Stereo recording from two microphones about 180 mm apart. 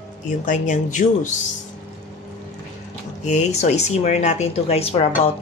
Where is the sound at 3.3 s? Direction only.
40° left (ahead or behind).